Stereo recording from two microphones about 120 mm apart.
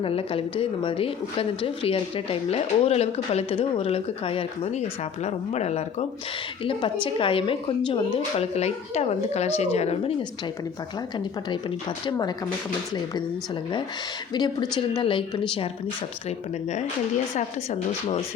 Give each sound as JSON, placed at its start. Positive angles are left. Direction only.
{"t": 0.0, "sound": "a woman's voice", "side_deg": 50}
{"t": 5.2, "sound": "speech", "side_deg": 65}
{"t": 6.7, "sound": "a woman's voice", "side_deg": 45}
{"t": 8.4, "sound": "speech", "side_deg": 65}
{"t": 11.4, "sound": "speech", "side_deg": 40}
{"t": 14.3, "sound": "a woman's voice", "side_deg": 35}
{"t": 16.6, "sound": "speech", "side_deg": 75}